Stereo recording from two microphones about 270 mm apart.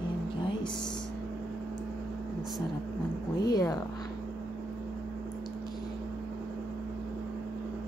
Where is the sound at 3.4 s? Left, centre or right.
Centre.